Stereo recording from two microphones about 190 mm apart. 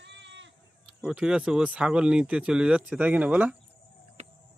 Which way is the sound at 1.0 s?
5° right (ahead or behind).